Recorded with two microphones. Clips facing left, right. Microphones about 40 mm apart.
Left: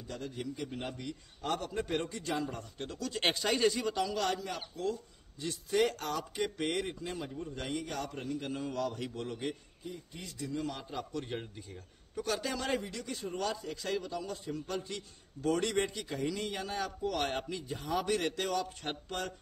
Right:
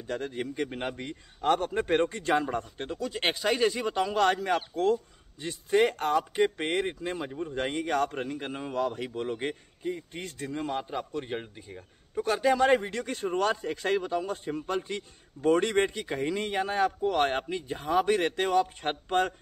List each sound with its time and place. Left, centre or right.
0.0 s a man's voice: right
2.9 s speech: right
3.9 s a man's voice: right
5.4 s speech: right